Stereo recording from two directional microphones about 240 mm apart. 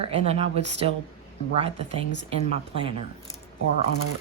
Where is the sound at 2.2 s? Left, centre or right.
Right.